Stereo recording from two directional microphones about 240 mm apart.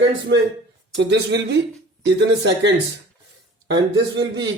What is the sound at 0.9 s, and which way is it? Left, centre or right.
Speech, right.